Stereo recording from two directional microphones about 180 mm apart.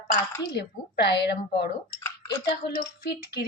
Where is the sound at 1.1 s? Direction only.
65° left (ahead or behind).